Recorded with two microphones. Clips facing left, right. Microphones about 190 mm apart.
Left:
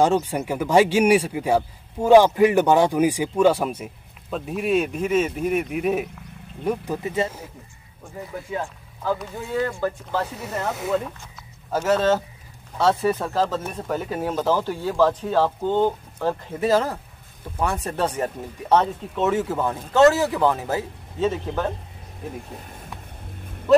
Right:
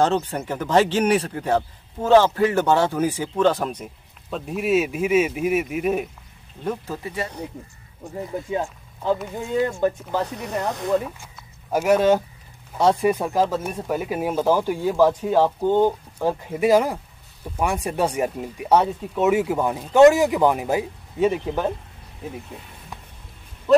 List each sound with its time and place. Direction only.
0.0 s speech: 10° left (ahead or behind)
6.6 s speech: 15° left (ahead or behind)
8.5 s speech: 20° right (ahead or behind)
10.2 s speech: 5° left (ahead or behind); by 21.7 s 15° right (ahead or behind)